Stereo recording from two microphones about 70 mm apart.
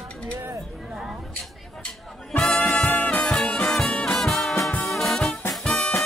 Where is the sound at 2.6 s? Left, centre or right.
Left.